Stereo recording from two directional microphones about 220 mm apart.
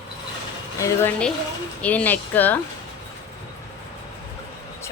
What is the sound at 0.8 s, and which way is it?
Speech, 10° left (ahead or behind).